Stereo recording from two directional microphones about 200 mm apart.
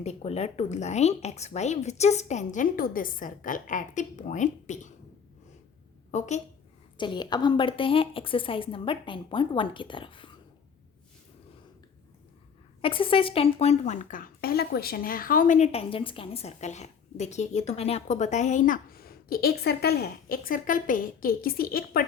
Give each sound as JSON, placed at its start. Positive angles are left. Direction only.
{"t": 0.0, "sound": "speech", "side_deg": 30}
{"t": 6.1, "sound": "a woman's voice", "side_deg": 35}
{"t": 6.9, "sound": "a woman's voice", "side_deg": 25}
{"t": 12.8, "sound": "speech", "side_deg": 25}